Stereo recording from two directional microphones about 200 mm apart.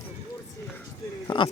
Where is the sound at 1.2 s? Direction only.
25° left (ahead or behind).